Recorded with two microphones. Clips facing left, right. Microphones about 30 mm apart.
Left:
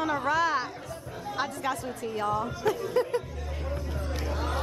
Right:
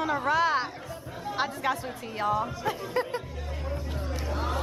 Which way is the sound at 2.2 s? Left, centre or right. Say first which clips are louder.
Right 1 dB; right.